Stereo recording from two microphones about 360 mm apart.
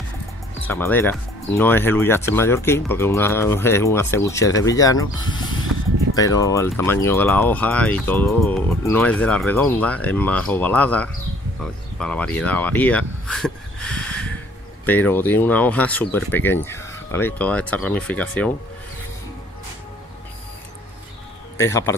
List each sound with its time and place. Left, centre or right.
0.6 s speech: centre
5.7 s music: right
6.1 s speech: centre
21.5 s speech: centre